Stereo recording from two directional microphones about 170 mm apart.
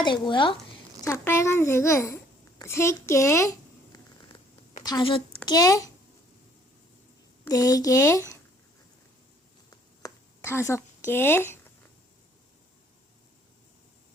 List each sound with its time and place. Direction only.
0.0 s speech: 30° left (ahead or behind)
1.0 s a child's voice: 15° left (ahead or behind)
3.9 s a sound: 20° left (ahead or behind)
4.8 s a woman's voice: 25° left (ahead or behind)
7.4 s speech: 20° left (ahead or behind)
9.6 s a sound: 20° left (ahead or behind)